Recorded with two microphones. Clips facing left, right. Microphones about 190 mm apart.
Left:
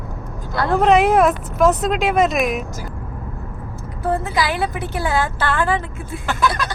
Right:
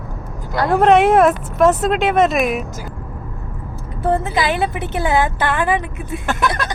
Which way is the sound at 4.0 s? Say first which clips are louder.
Right 2 dB; 25° right (ahead or behind).